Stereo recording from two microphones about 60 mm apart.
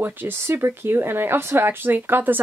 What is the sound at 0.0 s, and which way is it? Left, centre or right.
A woman's voice, right.